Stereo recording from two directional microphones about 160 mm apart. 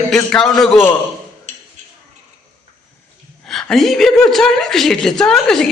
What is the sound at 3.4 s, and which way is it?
A man's voice, centre (ahead or behind).